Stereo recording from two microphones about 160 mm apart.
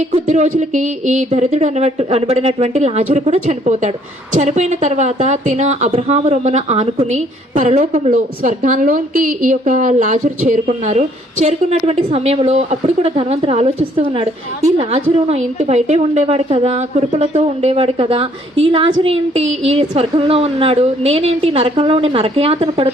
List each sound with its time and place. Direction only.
0.3 s a woman's voice: 50° right (ahead or behind)